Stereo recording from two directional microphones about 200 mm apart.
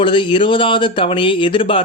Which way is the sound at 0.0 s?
25° left (ahead or behind).